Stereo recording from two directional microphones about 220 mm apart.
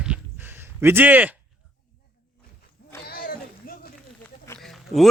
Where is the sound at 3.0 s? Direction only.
40° left (ahead or behind).